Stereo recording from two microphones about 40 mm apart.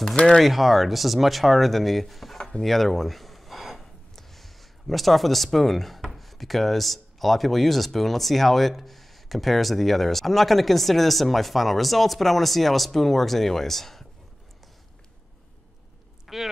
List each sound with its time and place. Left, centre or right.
0.1 s speech: left
0.4 s speech: centre
2.6 s a sound: centre
6.0 s speech: centre
16.3 s speech: centre